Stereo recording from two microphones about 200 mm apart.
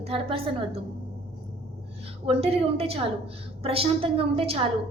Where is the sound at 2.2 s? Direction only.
30° right (ahead or behind).